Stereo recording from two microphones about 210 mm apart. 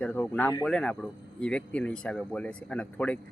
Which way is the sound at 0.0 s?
5° left (ahead or behind).